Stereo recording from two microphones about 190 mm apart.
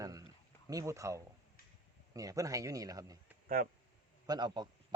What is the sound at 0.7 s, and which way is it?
Speech, 15° right (ahead or behind).